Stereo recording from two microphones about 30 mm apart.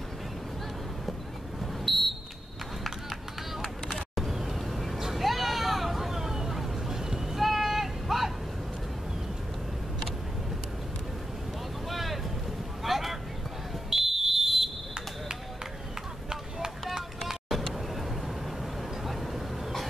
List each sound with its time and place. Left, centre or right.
1.6 s smoke detector: centre
4.1 s vehicle: centre
11.9 s boat: centre
12.8 s vehicle: centre
13.8 s fire alarm: centre
16.3 s a sound: right